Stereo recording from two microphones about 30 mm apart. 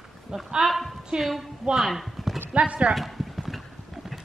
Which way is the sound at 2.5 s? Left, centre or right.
Right.